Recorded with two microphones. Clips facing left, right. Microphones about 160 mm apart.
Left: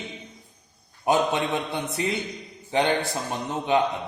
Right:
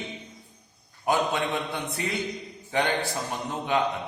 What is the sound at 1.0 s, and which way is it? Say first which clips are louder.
Speech: left 3 dB; 20° left (ahead or behind).